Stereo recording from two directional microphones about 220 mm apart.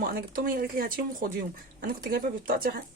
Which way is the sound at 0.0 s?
40° right (ahead or behind).